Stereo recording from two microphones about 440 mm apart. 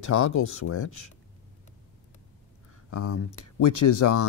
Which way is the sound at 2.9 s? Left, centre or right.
Left.